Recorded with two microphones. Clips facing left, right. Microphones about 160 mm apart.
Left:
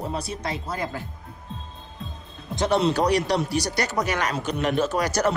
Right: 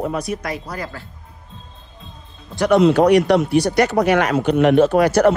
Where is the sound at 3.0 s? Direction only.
35° left (ahead or behind).